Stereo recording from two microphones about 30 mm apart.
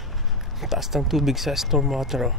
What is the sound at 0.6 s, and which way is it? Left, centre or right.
Speech, centre.